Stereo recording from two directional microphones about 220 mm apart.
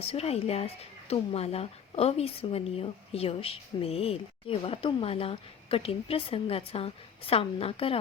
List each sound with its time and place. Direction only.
0.0 s speech: 25° left (ahead or behind)